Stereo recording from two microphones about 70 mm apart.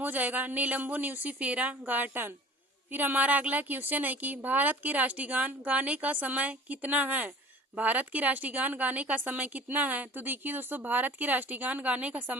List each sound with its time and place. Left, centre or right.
0.0 s a woman's voice: right